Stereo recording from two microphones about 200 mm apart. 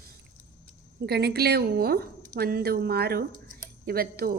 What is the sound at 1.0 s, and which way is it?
Speech, 55° right (ahead or behind).